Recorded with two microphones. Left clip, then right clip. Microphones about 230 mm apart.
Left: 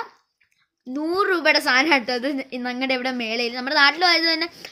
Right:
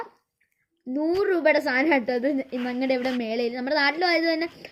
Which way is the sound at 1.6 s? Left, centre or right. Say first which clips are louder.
Left 5 dB; left.